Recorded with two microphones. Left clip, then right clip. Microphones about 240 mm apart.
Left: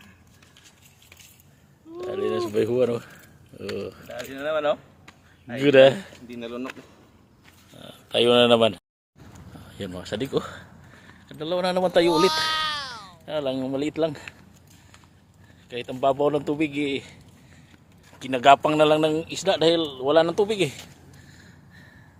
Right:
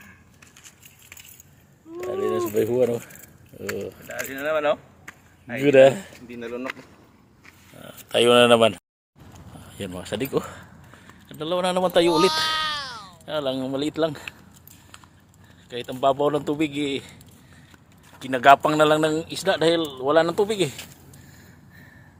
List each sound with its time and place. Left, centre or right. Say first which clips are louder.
2.0 s a sound: right 1 dB; centre
3.8 s speech: right 2 dB; centre
6.2 s speech: right 2 dB; left
7.8 s speech: right 2 dB; centre
15.7 s speech: right 1 dB; centre
18.2 s speech: right 1 dB; centre